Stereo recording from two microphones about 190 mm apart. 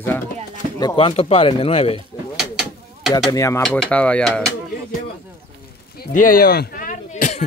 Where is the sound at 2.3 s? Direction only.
5° right (ahead or behind).